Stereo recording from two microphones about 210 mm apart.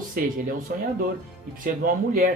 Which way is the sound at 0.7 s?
45° right (ahead or behind).